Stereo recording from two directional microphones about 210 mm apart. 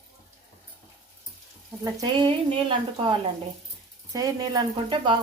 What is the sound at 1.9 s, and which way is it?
Speech, 20° right (ahead or behind).